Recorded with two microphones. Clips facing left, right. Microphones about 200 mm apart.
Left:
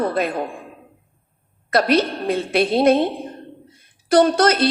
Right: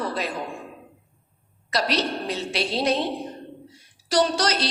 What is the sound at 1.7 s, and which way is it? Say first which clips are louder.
A woman's voice: left 7 dB; 55° left (ahead or behind).